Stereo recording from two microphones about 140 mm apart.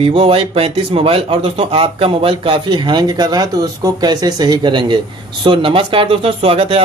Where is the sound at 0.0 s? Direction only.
40° right (ahead or behind).